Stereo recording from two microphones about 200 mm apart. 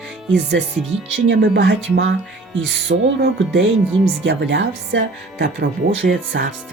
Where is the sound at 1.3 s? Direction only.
65° right (ahead or behind).